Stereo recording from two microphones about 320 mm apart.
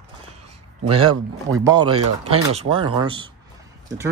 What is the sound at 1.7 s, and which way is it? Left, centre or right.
Speech, centre.